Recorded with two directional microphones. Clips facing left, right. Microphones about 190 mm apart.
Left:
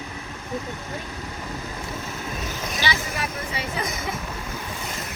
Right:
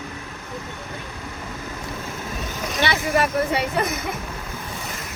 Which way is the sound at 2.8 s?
60° right (ahead or behind).